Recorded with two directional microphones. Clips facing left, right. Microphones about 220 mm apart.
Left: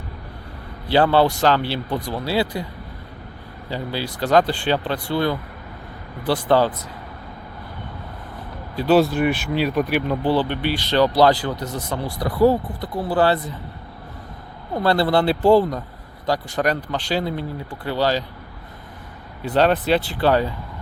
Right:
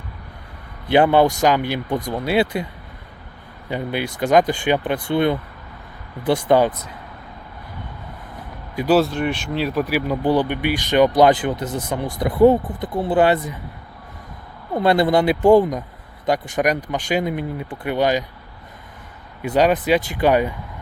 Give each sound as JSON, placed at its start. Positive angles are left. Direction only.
{"t": 0.9, "sound": "speech", "side_deg": -15}
{"t": 3.7, "sound": "speech", "side_deg": -20}
{"t": 8.9, "sound": "speech", "side_deg": 0}
{"t": 14.8, "sound": "speech", "side_deg": -15}
{"t": 19.4, "sound": "speech", "side_deg": -10}